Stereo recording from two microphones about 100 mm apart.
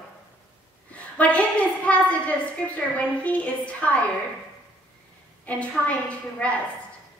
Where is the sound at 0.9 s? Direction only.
15° left (ahead or behind).